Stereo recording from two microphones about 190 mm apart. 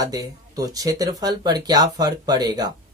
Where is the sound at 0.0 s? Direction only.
20° right (ahead or behind).